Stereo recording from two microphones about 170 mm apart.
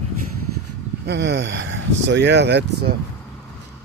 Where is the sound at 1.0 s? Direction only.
90° right.